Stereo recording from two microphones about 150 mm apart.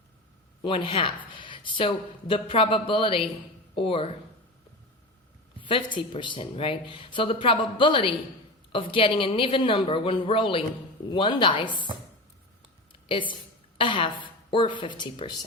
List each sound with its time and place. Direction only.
0.6 s speech: 35° left (ahead or behind)
5.5 s speech: 35° left (ahead or behind)
13.1 s a woman's voice: 35° left (ahead or behind)